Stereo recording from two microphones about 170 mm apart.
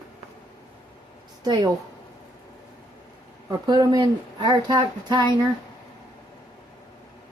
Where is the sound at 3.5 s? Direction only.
25° right (ahead or behind).